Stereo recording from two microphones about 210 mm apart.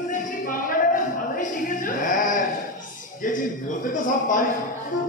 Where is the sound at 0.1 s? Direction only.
40° left (ahead or behind).